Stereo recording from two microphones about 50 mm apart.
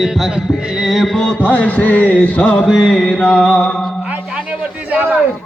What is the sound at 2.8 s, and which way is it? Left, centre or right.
Mantra, centre.